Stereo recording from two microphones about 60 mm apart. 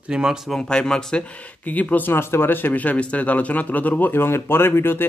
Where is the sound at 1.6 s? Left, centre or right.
Left.